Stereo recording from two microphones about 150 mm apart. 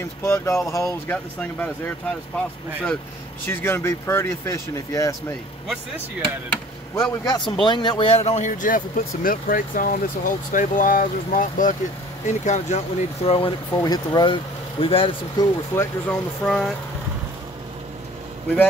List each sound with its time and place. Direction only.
0.0 s a man's voice: 20° left (ahead or behind)
1.1 s speech: 10° left (ahead or behind)
7.0 s a man's voice: 25° left (ahead or behind); by 11.7 s 60° left (ahead or behind)
12.3 s speech: 50° left (ahead or behind)
13.8 s speech: 25° left (ahead or behind)
15.7 s speech: 15° left (ahead or behind)
16.4 s speech: 5° left (ahead or behind)